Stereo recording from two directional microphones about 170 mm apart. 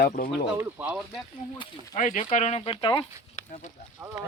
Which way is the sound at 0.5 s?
10° right (ahead or behind).